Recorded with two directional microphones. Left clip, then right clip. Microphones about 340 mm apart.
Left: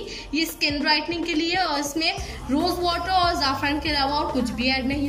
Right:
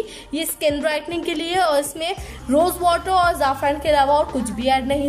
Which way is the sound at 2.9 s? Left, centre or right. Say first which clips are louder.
Right 5 dB; right.